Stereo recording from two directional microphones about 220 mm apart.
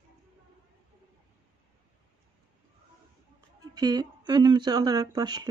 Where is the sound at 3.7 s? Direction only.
20° right (ahead or behind).